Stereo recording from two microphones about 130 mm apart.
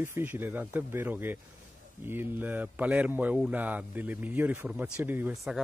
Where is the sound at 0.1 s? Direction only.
15° right (ahead or behind).